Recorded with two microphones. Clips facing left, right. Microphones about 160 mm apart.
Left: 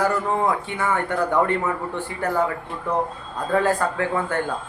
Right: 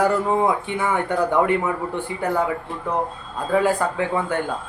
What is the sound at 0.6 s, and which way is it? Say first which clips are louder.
Speech: right 1 dB; 15° right (ahead or behind).